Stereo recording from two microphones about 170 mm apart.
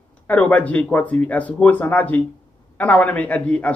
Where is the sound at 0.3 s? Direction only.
10° left (ahead or behind).